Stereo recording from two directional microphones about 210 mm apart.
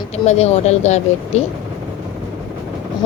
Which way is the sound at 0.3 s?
30° left (ahead or behind).